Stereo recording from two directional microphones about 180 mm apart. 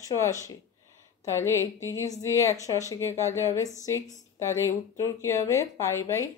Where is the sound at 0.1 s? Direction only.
15° left (ahead or behind).